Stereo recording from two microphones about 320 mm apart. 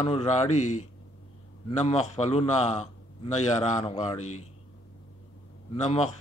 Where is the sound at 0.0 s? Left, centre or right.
Centre.